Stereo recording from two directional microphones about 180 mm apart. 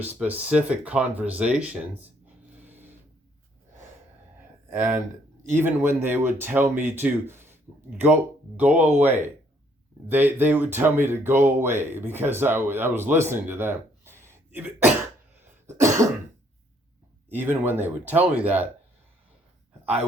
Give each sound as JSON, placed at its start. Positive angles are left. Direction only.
{"t": 0.0, "sound": "speech", "side_deg": -10}
{"t": 4.4, "sound": "a sound", "side_deg": -10}
{"t": 5.5, "sound": "speech", "side_deg": -10}
{"t": 15.6, "sound": "cough", "side_deg": -15}
{"t": 17.2, "sound": "speech", "side_deg": -10}